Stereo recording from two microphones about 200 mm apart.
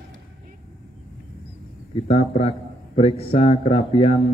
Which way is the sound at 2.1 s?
30° left (ahead or behind).